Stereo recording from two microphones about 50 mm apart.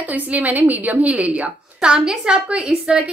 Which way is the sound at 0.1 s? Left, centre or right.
Right.